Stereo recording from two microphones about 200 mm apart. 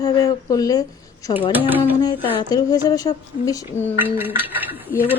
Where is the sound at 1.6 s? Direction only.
10° right (ahead or behind).